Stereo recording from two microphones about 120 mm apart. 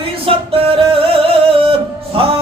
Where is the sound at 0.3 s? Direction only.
50° right (ahead or behind).